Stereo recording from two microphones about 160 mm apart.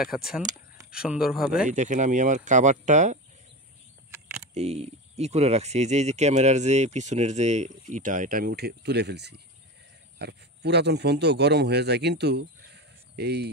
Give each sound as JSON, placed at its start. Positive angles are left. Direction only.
{"t": 0.9, "sound": "speech", "side_deg": -5}
{"t": 1.7, "sound": "speech", "side_deg": -50}
{"t": 4.6, "sound": "speech", "side_deg": -40}